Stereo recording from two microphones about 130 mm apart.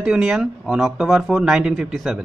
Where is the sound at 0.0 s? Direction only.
5° right (ahead or behind).